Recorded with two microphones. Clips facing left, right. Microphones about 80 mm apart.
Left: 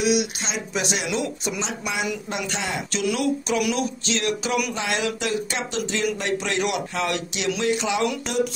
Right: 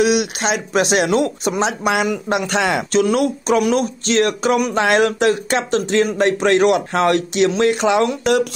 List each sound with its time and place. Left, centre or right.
0.0 s speech: right
2.0 s speech: right
2.9 s speech: right